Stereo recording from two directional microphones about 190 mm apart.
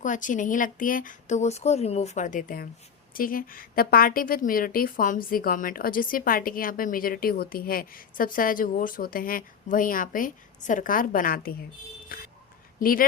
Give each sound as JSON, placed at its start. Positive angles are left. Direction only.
{"t": 0.0, "sound": "a woman's voice", "side_deg": 40}